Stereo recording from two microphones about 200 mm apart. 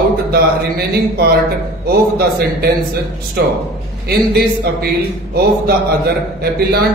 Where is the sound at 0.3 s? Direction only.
50° right (ahead or behind).